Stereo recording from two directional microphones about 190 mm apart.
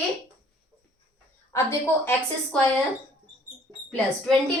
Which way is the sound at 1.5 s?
15° left (ahead or behind).